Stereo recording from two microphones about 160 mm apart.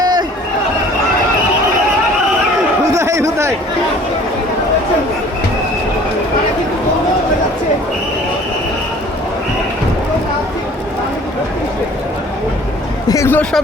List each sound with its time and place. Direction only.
0.0 s chatter: 25° right (ahead or behind)
2.9 s a sound: 20° right (ahead or behind)
13.1 s hubbub: 20° left (ahead or behind)